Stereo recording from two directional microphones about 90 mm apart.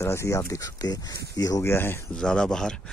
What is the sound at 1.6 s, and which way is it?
Speech, 25° left (ahead or behind).